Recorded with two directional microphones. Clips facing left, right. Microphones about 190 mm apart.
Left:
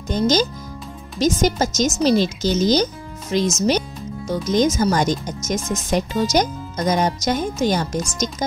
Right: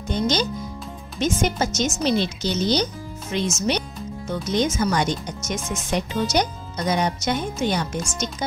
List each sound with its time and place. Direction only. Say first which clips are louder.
0.1 s speech: left 4 dB; 40° left (ahead or behind)